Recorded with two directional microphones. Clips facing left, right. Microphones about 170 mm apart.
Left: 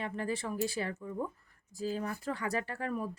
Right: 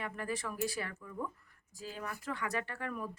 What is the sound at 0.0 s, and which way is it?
A woman's voice, 30° left (ahead or behind).